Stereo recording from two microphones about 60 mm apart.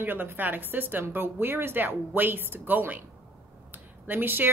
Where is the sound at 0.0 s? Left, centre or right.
Right.